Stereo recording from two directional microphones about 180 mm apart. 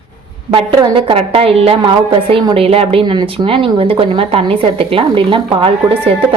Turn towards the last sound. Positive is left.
turn(degrees=-30)  # may be behind; listen again after turning